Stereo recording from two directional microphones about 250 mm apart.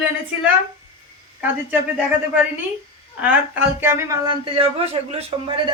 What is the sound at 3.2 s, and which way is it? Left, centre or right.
Speech, centre.